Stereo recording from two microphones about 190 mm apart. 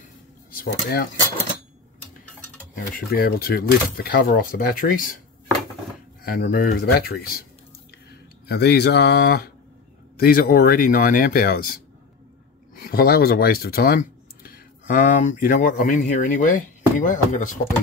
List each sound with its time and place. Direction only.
0.5 s speech: 50° left (ahead or behind)
2.9 s speech: 55° left (ahead or behind)
6.2 s speech: 50° left (ahead or behind)
8.5 s speech: 60° left (ahead or behind); by 17.6 s 45° left (ahead or behind)